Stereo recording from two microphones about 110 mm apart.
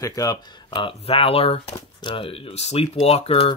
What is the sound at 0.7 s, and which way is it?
Speech, 55° left (ahead or behind).